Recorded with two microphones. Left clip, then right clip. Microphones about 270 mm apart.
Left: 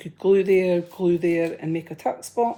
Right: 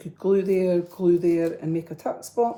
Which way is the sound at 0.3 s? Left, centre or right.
Left.